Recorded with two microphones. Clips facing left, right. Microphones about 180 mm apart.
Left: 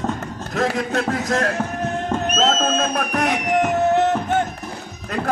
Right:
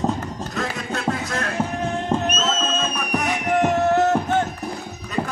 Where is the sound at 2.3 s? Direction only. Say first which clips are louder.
Left 4 dB; 85° left.